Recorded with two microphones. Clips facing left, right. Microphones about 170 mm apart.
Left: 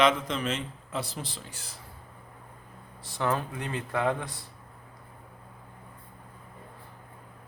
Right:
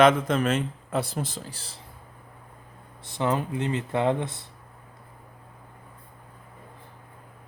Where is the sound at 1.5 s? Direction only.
35° right (ahead or behind).